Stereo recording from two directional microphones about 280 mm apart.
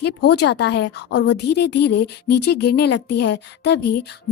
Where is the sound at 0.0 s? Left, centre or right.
Left.